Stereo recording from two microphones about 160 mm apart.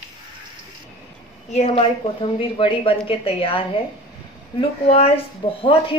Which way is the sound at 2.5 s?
35° left (ahead or behind).